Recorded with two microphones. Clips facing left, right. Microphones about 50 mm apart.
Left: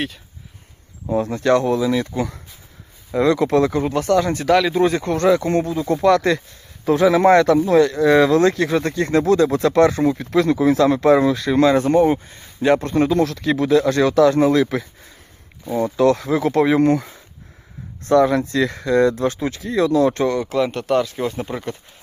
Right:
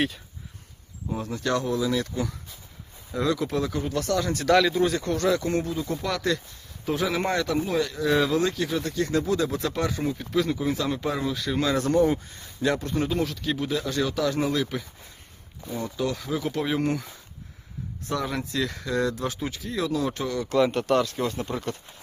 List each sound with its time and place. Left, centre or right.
1.2 s speech: left
3.9 s speech: left
5.9 s speech: left
6.8 s speech: left
9.2 s speech: left
9.7 s speech: left
11.8 s speech: left
12.8 s speech: left
20.5 s speech: centre